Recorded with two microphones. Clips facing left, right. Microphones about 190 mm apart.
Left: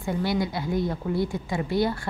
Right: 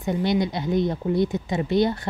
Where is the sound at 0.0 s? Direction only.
20° right (ahead or behind).